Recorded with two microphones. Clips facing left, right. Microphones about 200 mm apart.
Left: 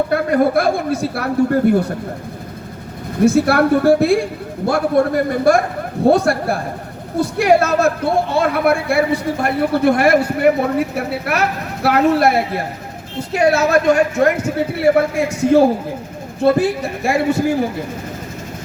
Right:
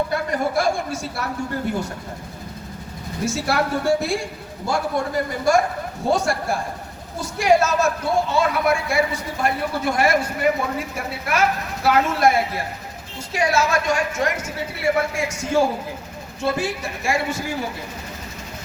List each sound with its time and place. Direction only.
0.1 s a man's voice: 60° left (ahead or behind)
3.2 s a man's voice: 60° left (ahead or behind)